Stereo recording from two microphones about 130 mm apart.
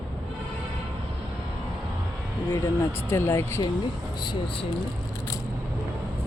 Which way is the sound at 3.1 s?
20° left (ahead or behind).